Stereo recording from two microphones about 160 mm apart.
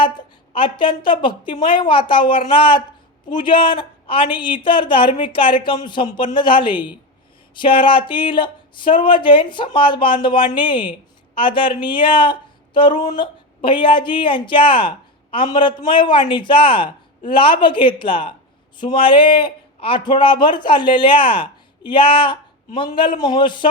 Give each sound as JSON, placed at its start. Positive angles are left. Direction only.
{"t": 0.0, "sound": "speech", "side_deg": 30}